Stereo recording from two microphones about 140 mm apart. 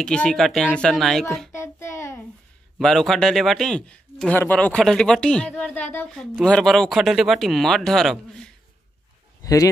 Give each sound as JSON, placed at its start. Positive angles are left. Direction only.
{"t": 0.0, "sound": "a man's voice", "side_deg": 5}
{"t": 1.5, "sound": "a child's voice", "side_deg": 20}
{"t": 2.8, "sound": "a man's voice", "side_deg": 0}
{"t": 9.4, "sound": "a sound", "side_deg": 25}